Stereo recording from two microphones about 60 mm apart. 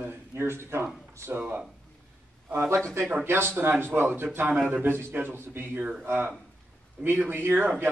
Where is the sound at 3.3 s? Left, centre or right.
Right.